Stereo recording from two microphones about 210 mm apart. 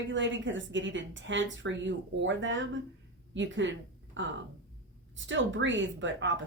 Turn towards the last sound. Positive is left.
turn(degrees=-60)  # may be behind; listen again after turning